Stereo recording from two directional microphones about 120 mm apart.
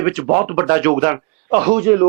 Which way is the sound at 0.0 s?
20° right (ahead or behind).